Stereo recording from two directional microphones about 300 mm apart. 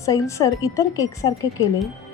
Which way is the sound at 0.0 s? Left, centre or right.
Centre.